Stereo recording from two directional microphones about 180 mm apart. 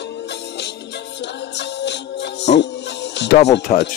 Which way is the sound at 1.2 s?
75° left (ahead or behind).